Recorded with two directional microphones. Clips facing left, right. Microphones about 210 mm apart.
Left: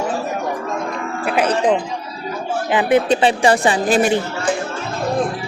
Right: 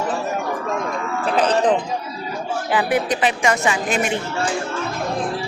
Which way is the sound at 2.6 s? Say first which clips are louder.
Left 5 dB; 20° left (ahead or behind).